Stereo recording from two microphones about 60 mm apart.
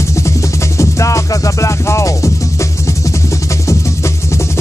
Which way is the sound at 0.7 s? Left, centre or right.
Left.